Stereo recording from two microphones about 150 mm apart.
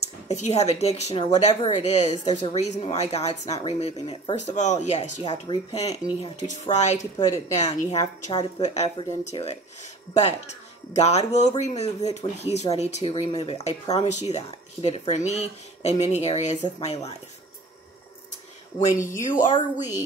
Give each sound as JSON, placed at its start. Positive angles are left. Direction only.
{"t": 0.0, "sound": "a woman's voice", "side_deg": 45}
{"t": 5.2, "sound": "speech", "side_deg": 30}
{"t": 5.7, "sound": "speech", "side_deg": 45}
{"t": 19.1, "sound": "speech", "side_deg": 60}